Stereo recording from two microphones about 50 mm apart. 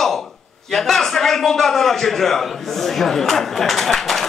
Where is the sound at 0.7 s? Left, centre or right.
Centre.